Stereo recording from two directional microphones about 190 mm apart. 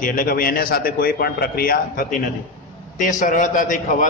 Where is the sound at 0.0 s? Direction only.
45° left (ahead or behind).